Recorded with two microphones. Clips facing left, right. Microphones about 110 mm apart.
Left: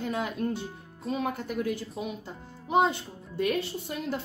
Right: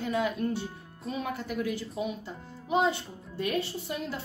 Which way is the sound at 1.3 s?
45° left (ahead or behind).